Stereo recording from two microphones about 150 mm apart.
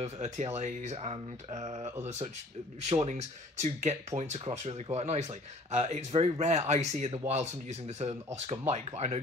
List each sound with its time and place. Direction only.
0.0 s speech: 50° right (ahead or behind)